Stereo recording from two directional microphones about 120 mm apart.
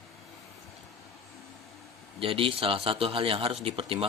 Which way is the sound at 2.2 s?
50° right (ahead or behind).